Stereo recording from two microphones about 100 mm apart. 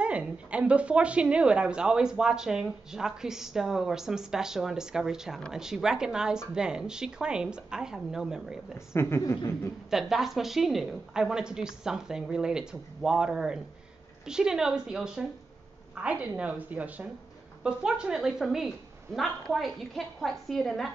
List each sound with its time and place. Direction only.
0.0 s speech: 10° right (ahead or behind)
8.7 s a woman's voice: 25° left (ahead or behind)
9.2 s a sound: 35° left (ahead or behind)
9.8 s a woman's voice: 5° right (ahead or behind)